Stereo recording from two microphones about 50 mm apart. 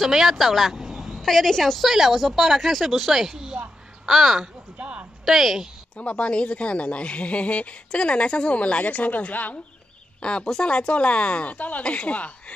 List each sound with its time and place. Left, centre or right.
0.0 s speech: centre
1.2 s a woman's voice: centre
4.7 s speech: right
5.2 s a woman's voice: centre
5.9 s speech: left
10.2 s speech: centre